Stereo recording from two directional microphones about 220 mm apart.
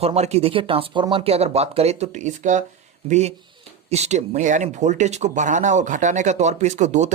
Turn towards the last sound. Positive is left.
turn(degrees=-30)  # may be behind; listen again after turning